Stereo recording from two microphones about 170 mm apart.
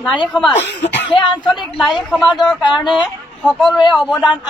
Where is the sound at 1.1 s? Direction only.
30° left (ahead or behind).